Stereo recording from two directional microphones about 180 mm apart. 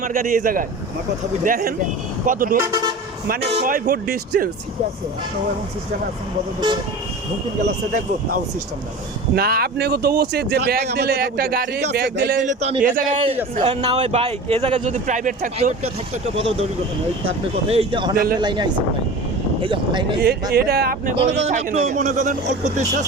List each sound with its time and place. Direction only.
0.0 s speech: 50° right (ahead or behind)
2.6 s speech: 20° right (ahead or behind)
3.4 s speech: 35° right (ahead or behind)
3.7 s speech: 60° right (ahead or behind)
9.3 s speech: 55° right (ahead or behind)
12.4 s speech: 45° right (ahead or behind)
13.2 s speech: 35° right (ahead or behind)
17.7 s speech: 30° right (ahead or behind)
18.1 s speech: 55° right (ahead or behind)
18.3 s speech: 25° right (ahead or behind)
20.1 s speech: 60° right (ahead or behind)
21.4 s speech: 40° right (ahead or behind)